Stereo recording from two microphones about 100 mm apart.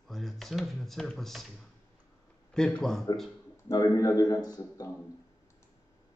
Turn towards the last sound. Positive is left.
turn(degrees=40)  # may be behind; listen again after turning